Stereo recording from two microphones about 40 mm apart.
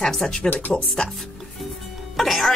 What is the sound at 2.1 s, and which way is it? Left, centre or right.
Speech, centre.